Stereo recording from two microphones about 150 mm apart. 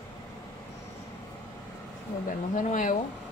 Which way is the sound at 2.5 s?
60° left (ahead or behind).